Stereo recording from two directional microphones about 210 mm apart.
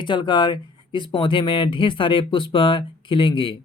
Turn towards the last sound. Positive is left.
turn(degrees=25)  # may be behind; listen again after turning